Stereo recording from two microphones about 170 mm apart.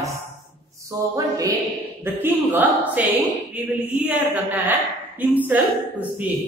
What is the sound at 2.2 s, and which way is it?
A woman's voice, 10° right (ahead or behind).